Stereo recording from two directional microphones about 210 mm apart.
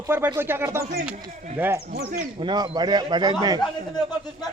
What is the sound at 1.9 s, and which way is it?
Speech, 50° right (ahead or behind).